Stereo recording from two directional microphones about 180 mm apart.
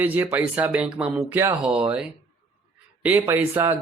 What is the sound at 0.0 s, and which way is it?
A man's voice, 10° right (ahead or behind).